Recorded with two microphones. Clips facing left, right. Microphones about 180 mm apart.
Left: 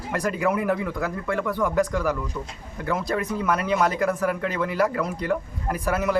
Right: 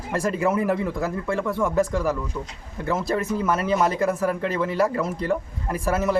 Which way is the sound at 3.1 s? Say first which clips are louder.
Right 2 dB; 25° right (ahead or behind).